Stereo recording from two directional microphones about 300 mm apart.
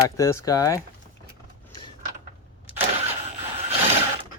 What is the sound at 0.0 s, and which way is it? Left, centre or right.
Speech, centre.